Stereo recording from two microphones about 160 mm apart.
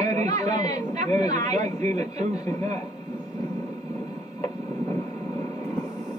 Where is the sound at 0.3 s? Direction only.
20° left (ahead or behind).